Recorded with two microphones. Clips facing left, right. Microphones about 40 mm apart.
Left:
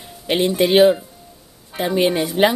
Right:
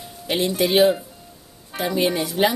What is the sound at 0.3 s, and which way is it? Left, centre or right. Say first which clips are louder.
Speech: left 4 dB; centre.